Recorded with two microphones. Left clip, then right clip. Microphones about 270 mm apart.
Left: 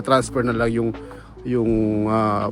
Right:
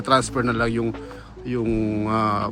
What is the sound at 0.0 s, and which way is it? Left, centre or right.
Speech, centre.